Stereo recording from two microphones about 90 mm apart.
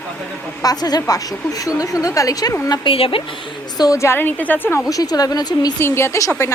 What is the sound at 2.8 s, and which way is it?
Speech, 90° left.